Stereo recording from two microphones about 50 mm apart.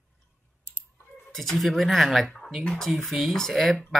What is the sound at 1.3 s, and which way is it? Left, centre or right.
Speech, centre.